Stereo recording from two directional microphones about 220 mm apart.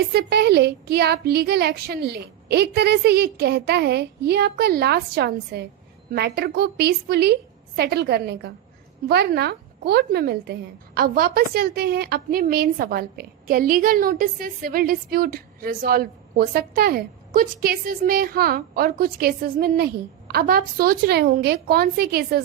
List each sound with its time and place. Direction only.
0.1 s a woman's voice: 50° right (ahead or behind)